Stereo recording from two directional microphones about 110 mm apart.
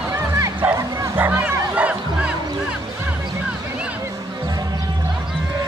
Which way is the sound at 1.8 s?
10° right (ahead or behind).